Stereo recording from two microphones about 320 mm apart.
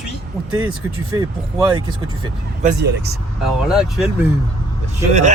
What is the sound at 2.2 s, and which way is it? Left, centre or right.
Speech, right.